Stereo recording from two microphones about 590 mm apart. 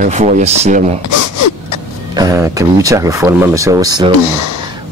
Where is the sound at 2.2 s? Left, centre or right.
Centre.